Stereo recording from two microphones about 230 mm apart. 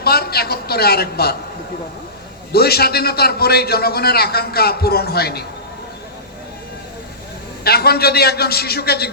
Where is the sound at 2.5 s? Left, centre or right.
Left.